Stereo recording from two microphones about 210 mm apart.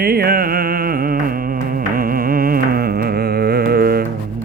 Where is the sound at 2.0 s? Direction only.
45° right (ahead or behind).